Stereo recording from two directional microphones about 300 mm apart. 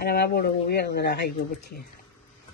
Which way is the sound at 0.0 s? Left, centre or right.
Left.